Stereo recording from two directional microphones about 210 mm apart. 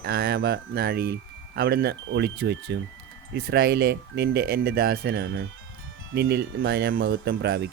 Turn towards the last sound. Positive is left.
turn(degrees=-50)  # may be behind; listen again after turning